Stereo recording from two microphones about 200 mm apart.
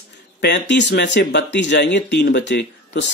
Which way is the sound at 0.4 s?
60° left (ahead or behind).